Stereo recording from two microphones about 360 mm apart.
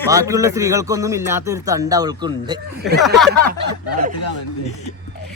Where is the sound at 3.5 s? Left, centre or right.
Right.